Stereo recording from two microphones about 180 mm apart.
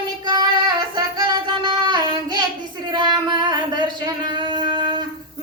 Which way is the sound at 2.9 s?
25° right (ahead or behind).